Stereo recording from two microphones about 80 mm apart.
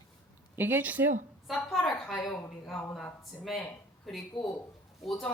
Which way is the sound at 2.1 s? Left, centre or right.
Centre.